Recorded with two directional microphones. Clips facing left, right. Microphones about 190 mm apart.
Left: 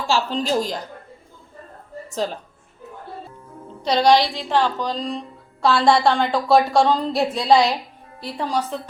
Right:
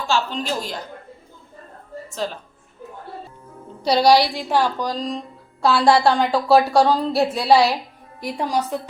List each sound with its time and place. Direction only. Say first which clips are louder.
0.1 s a woman's voice: left 3 dB; 35° left (ahead or behind)
2.0 s a woman's voice: left 2 dB; 40° left (ahead or behind)
3.8 s a woman's voice: right 1 dB; 10° right (ahead or behind)